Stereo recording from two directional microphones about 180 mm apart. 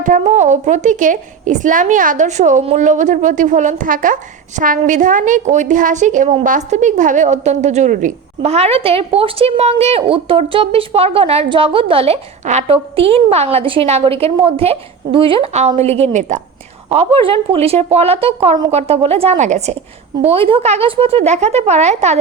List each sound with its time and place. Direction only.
0.0 s a woman's voice: 45° right (ahead or behind)